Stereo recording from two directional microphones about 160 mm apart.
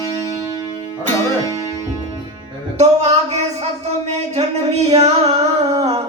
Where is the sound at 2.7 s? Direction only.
40° right (ahead or behind).